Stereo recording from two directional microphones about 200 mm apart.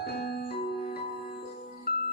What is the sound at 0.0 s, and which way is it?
Music, 50° left (ahead or behind).